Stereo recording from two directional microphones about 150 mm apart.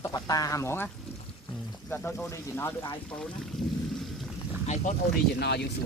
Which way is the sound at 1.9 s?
10° left (ahead or behind).